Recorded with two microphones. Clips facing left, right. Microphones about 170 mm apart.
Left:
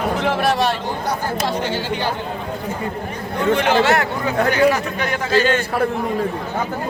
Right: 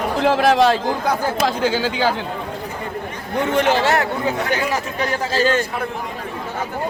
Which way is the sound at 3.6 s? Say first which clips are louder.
Right 1 dB; 40° right (ahead or behind).